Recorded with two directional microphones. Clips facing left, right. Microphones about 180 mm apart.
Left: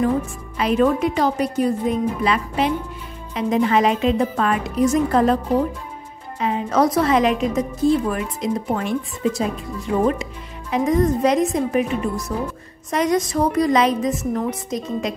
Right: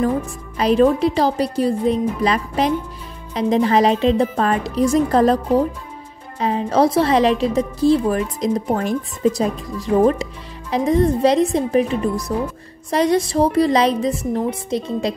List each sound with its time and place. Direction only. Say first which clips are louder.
0.6 s a woman's voice: right 3 dB; 35° right (ahead or behind)
6.4 s a woman's voice: right 2 dB; 30° right (ahead or behind)